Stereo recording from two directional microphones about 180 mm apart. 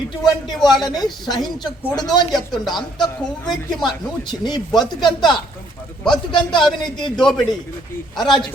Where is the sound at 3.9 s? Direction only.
25° left (ahead or behind).